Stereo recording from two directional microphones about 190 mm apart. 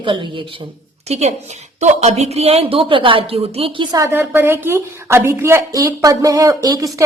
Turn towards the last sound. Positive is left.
turn(degrees=-20)  # may be behind; listen again after turning